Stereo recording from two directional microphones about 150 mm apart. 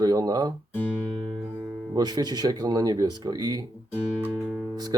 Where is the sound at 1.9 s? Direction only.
25° right (ahead or behind).